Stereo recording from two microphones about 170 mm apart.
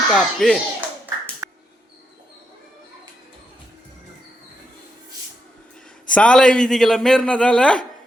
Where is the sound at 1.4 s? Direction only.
15° right (ahead or behind).